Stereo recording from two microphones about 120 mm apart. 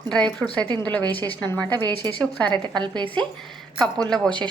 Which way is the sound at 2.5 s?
40° right (ahead or behind).